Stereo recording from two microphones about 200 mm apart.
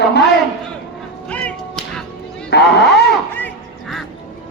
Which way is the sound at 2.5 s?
55° left (ahead or behind).